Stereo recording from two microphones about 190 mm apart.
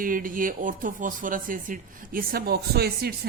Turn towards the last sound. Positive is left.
turn(degrees=-55)  # may be behind; listen again after turning